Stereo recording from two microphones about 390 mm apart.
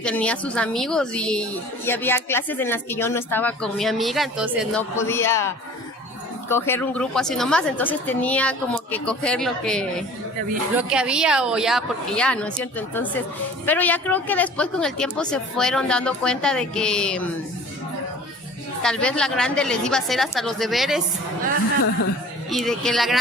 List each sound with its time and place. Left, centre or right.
0.0 s a woman's voice: centre
6.5 s a woman's voice: centre
18.8 s a woman's voice: centre
22.4 s a woman's voice: centre